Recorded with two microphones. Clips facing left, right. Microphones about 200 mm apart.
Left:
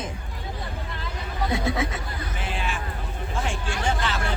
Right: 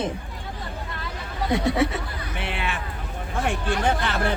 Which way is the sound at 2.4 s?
65° right (ahead or behind).